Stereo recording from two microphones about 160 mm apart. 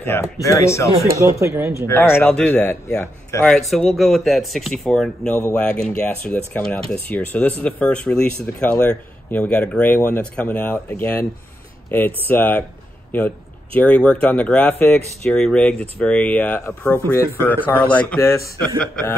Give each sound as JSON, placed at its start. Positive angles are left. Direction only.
{"t": 0.0, "sound": "speech", "side_deg": 15}
{"t": 1.0, "sound": "speech", "side_deg": -20}
{"t": 1.9, "sound": "speech", "side_deg": 15}
{"t": 3.4, "sound": "speech", "side_deg": 0}
{"t": 12.3, "sound": "speech", "side_deg": 10}
{"t": 13.7, "sound": "speech", "side_deg": 10}